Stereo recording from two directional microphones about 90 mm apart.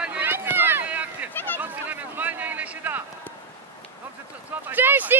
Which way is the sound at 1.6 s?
20° right (ahead or behind).